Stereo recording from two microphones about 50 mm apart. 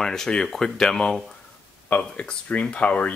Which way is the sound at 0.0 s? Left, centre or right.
Centre.